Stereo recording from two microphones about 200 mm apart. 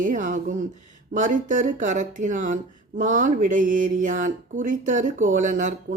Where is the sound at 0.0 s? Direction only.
40° right (ahead or behind).